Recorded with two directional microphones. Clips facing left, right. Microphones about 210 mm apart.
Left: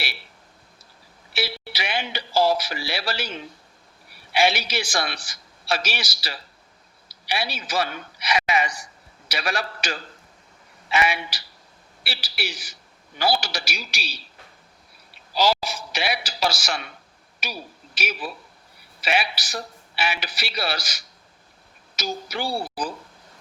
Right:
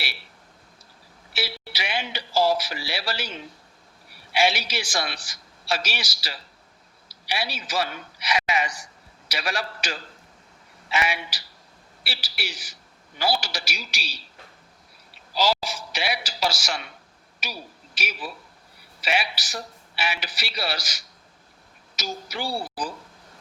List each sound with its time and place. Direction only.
1.3 s a sound: 55° left (ahead or behind)
4.4 s a man's voice: 55° left (ahead or behind)
12.0 s a man's voice: 60° left (ahead or behind)
15.4 s a man's voice: 55° left (ahead or behind)
17.9 s a man's voice: 55° left (ahead or behind)